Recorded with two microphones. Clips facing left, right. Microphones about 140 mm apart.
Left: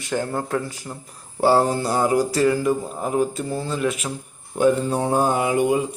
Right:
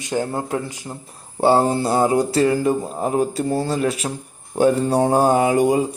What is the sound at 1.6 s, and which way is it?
Mantra, 25° right (ahead or behind).